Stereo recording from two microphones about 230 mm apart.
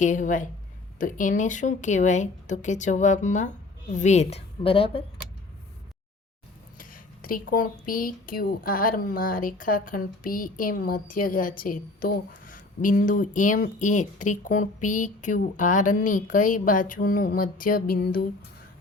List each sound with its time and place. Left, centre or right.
0.0 s a woman's voice: left
6.7 s speech: left